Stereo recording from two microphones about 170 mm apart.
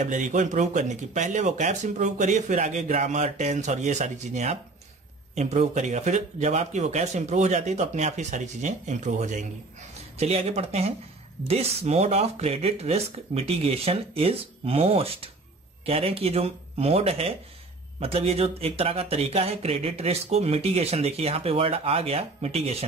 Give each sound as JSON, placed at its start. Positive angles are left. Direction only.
{"t": 0.0, "sound": "speech", "side_deg": -45}